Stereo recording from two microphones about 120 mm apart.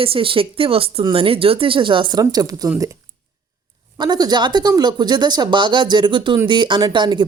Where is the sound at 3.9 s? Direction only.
35° right (ahead or behind).